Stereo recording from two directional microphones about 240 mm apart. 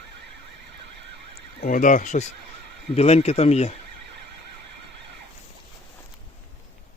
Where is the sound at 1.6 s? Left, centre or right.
Left.